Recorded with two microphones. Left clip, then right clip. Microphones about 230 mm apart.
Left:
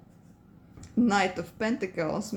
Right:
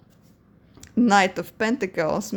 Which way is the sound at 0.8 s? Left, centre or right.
Right.